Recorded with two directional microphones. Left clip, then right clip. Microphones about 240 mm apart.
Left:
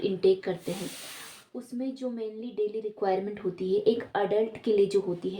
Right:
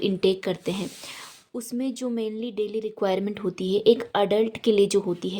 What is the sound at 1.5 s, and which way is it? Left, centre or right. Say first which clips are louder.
Speech: right 5 dB; right.